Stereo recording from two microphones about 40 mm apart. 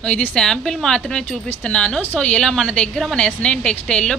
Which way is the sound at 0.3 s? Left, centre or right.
Centre.